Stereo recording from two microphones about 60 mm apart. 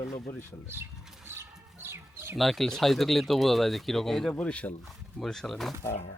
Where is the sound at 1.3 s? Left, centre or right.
Right.